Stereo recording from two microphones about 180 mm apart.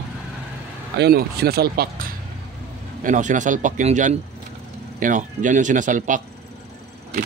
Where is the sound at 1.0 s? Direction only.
60° right (ahead or behind).